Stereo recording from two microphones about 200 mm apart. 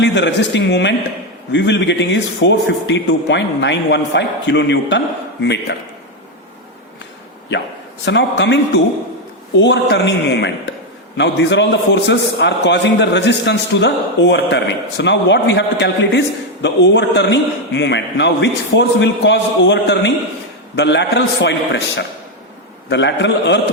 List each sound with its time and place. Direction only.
0.0 s a man's voice: 60° left (ahead or behind)
8.0 s a man's voice: 60° left (ahead or behind)
22.9 s a man's voice: 60° left (ahead or behind)